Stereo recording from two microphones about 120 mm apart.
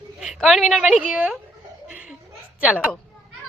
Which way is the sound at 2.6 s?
5° right (ahead or behind).